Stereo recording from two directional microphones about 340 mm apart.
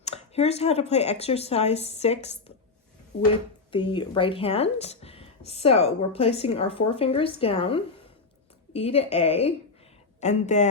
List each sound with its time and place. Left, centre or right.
0.0 s speech: centre
3.7 s speech: centre